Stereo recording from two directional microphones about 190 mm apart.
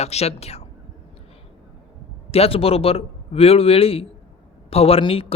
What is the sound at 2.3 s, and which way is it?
A man's voice, 30° left (ahead or behind).